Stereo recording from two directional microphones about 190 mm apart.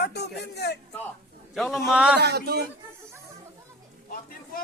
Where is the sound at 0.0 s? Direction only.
60° left (ahead or behind).